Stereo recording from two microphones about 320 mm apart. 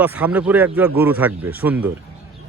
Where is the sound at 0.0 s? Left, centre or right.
Centre.